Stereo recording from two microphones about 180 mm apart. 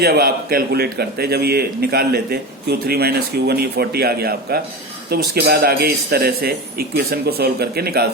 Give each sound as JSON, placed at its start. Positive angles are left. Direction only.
{"t": 0.0, "sound": "a man's voice", "side_deg": -60}